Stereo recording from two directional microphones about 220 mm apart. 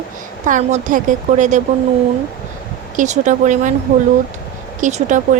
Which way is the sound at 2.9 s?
35° right (ahead or behind).